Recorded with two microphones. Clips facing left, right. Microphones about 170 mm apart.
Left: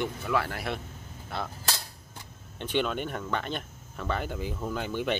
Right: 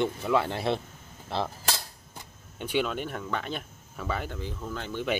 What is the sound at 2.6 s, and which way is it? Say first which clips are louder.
Speech: even; 5° right (ahead or behind).